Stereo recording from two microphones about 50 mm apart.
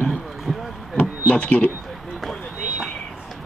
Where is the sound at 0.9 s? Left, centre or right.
Left.